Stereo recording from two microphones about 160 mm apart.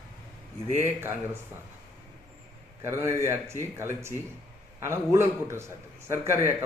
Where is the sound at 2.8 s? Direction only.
15° right (ahead or behind).